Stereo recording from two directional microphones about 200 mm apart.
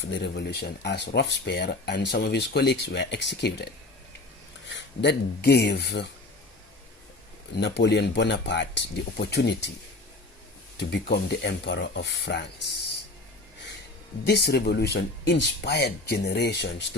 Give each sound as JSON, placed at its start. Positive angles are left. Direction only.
{"t": 0.0, "sound": "speech", "side_deg": 65}
{"t": 4.7, "sound": "speech", "side_deg": 60}
{"t": 7.5, "sound": "speech", "side_deg": 55}
{"t": 10.8, "sound": "speech", "side_deg": 55}
{"t": 14.3, "sound": "speech", "side_deg": 55}